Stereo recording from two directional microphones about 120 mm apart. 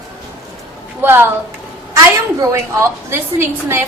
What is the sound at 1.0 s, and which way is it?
Speech, 15° right (ahead or behind).